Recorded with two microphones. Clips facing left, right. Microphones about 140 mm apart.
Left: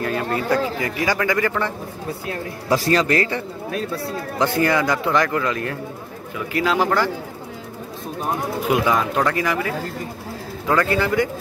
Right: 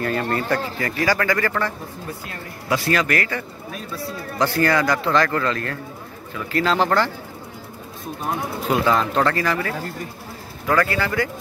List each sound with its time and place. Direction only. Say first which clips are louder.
0.0 s speech: even; 5° left (ahead or behind)
0.7 s a man's voice: even; 15° left (ahead or behind)
2.7 s a man's voice: left 3 dB; 30° left (ahead or behind); by 7.1 s 10° left (ahead or behind)
8.6 s a man's voice: even; 10° left (ahead or behind)